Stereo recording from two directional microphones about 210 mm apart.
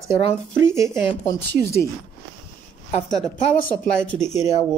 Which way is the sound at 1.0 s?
15° left (ahead or behind).